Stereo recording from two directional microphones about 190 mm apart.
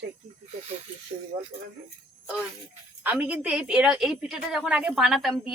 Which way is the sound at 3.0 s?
10° right (ahead or behind).